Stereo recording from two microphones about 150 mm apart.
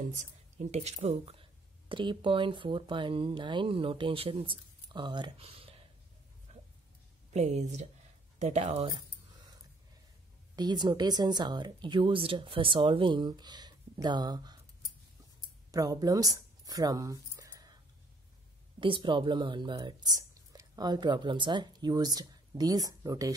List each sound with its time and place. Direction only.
0.0 s speech: 55° right (ahead or behind); by 5.8 s 40° right (ahead or behind)
7.3 s speech: 50° right (ahead or behind)
10.5 s speech: 30° right (ahead or behind)
15.7 s speech: 25° right (ahead or behind)
18.8 s speech: 35° right (ahead or behind)